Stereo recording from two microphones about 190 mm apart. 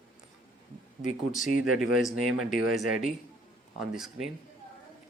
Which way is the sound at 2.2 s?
45° left (ahead or behind).